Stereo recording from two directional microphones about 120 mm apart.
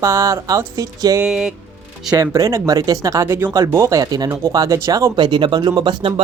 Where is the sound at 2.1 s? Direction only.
25° right (ahead or behind).